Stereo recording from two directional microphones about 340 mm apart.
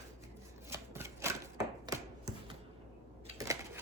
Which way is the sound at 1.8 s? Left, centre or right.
Centre.